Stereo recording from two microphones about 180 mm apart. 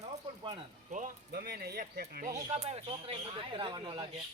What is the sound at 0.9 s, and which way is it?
Speech, 45° right (ahead or behind).